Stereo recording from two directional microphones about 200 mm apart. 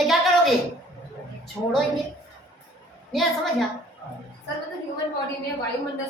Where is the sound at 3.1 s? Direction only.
Centre (ahead or behind).